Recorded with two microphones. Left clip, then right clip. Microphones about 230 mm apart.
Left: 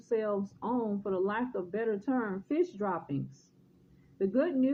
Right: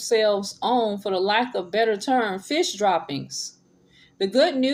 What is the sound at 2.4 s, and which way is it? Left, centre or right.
Speech, right.